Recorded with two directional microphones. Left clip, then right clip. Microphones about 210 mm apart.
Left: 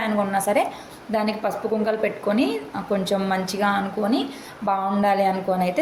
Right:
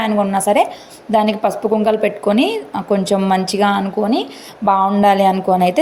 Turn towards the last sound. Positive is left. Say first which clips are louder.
# right 8 dB
turn(degrees=-35)  # may be behind; listen again after turning